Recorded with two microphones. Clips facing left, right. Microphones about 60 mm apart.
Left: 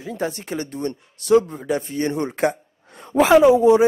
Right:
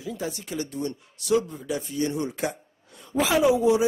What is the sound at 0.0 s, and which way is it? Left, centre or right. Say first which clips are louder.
A woman's voice: left 6 dB; left.